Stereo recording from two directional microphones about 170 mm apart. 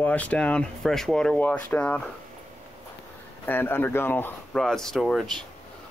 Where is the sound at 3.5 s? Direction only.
10° left (ahead or behind).